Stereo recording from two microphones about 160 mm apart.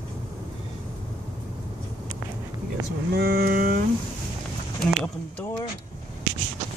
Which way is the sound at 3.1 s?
75° right (ahead or behind).